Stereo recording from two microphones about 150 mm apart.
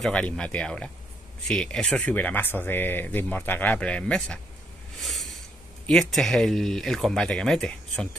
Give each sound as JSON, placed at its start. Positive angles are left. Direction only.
{"t": 0.0, "sound": "speech", "side_deg": 5}
{"t": 5.0, "sound": "a sound", "side_deg": 0}
{"t": 5.9, "sound": "speech", "side_deg": 5}